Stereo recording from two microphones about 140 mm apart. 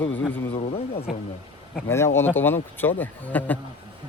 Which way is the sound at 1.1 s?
Centre (ahead or behind).